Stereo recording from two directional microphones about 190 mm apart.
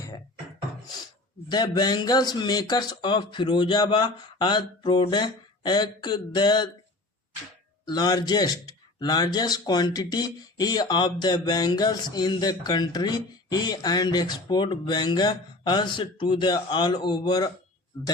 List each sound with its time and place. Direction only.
1.5 s speech: 20° left (ahead or behind)
7.9 s speech: 20° left (ahead or behind)